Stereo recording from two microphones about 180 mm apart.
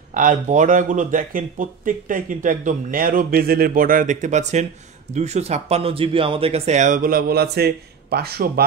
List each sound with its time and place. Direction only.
0.1 s a man's voice: 45° right (ahead or behind)